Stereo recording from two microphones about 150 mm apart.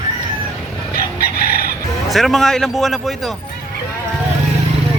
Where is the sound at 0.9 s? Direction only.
90° left.